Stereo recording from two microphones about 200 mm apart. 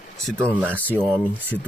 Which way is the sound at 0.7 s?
10° left (ahead or behind).